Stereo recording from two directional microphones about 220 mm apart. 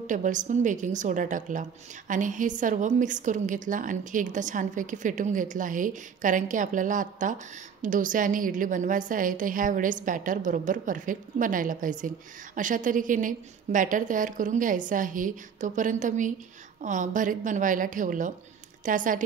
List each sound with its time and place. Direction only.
0.0 s a woman's voice: 35° right (ahead or behind)